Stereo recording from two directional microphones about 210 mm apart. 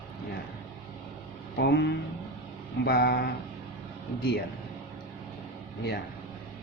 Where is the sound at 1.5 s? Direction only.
55° left (ahead or behind).